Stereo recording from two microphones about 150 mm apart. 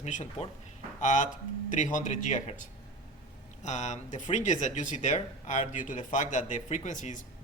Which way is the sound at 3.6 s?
50° left (ahead or behind).